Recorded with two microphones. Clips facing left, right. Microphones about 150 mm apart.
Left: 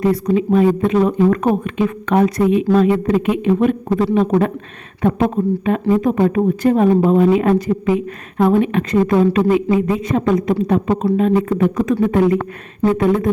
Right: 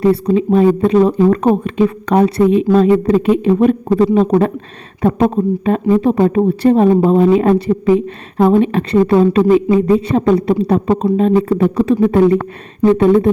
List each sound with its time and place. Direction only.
0.0 s speech: 30° right (ahead or behind)